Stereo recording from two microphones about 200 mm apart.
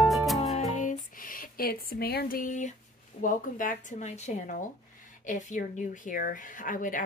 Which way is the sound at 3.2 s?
40° left (ahead or behind).